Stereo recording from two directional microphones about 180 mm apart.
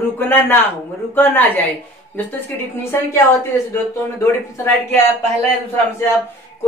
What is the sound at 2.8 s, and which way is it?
Speech, 15° left (ahead or behind).